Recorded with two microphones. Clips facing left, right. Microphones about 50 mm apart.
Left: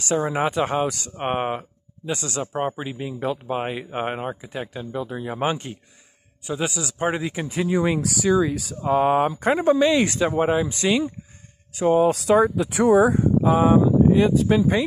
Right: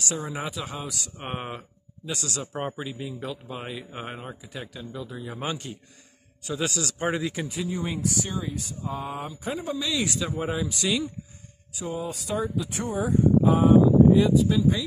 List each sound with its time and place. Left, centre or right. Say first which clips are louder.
0.0 s speech: left 9 dB; left
6.4 s a man's voice: left 3 dB; centre
7.6 s speech: left 9 dB; left
8.8 s speech: left 16 dB; left
9.8 s speech: left 9 dB; left
11.7 s speech: left 14 dB; left
13.8 s speech: left 1 dB; left